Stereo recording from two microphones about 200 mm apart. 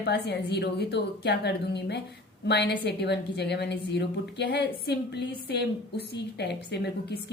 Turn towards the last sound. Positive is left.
turn(degrees=55)  # may be behind; listen again after turning